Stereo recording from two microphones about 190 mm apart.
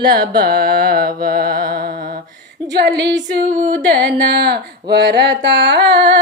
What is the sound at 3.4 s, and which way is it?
Carnatic music, 50° right (ahead or behind).